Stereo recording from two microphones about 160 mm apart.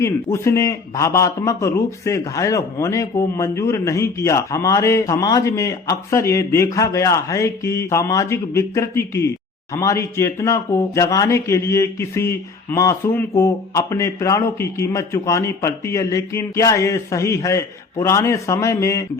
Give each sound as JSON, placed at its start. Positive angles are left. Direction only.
{"t": 0.0, "sound": "speech", "side_deg": 20}